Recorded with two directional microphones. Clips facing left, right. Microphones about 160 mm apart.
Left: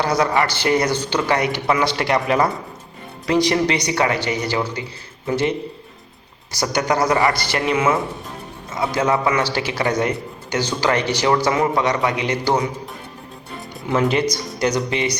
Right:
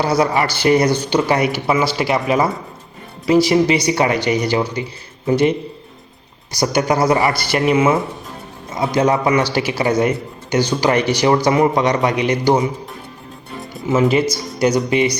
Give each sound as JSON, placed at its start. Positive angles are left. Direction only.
{"t": 0.0, "sound": "speech", "side_deg": -10}
{"t": 6.6, "sound": "speech", "side_deg": -10}
{"t": 8.7, "sound": "a man's voice", "side_deg": -20}
{"t": 13.6, "sound": "speech", "side_deg": 0}